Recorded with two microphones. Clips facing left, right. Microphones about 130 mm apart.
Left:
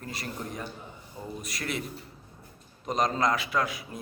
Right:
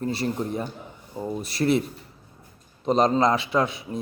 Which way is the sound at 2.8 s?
30° right (ahead or behind).